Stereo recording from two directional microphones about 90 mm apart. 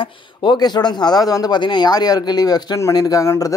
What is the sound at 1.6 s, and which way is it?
Speech, 55° left (ahead or behind).